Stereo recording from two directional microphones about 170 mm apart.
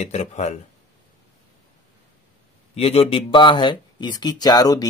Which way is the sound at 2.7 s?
35° left (ahead or behind).